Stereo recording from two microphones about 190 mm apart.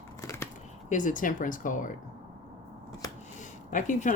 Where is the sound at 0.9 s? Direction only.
40° left (ahead or behind).